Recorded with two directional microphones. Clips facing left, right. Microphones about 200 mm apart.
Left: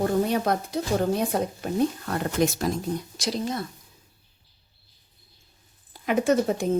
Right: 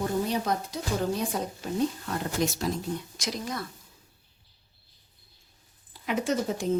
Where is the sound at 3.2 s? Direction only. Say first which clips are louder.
Left 5 dB; 30° left (ahead or behind).